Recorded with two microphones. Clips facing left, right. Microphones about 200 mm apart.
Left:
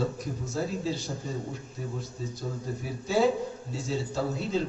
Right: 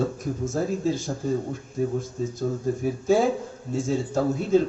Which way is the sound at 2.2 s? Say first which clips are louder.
Right 9 dB; 45° right (ahead or behind).